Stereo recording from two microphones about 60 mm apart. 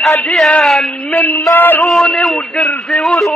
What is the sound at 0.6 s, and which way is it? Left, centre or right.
Speech, centre.